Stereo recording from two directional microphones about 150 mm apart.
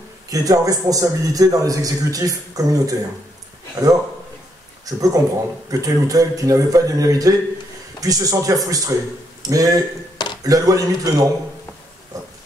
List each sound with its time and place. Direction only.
0.3 s a man's voice: 25° right (ahead or behind)
10.1 s a sound: 30° left (ahead or behind)
10.4 s a man's voice: 25° right (ahead or behind)